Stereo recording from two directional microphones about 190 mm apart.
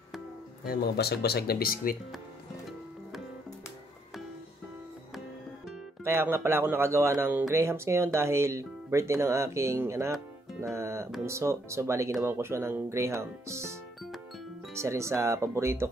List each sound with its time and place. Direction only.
0.7 s speech: 60° left (ahead or behind)
6.0 s speech: 10° right (ahead or behind)
10.6 s music: 15° right (ahead or behind)
11.2 s speech: 15° right (ahead or behind)